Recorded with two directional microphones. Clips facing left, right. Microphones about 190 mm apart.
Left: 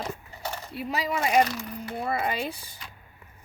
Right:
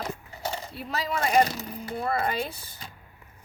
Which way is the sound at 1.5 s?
35° right (ahead or behind).